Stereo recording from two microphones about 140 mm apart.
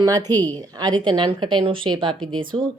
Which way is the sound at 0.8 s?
30° right (ahead or behind).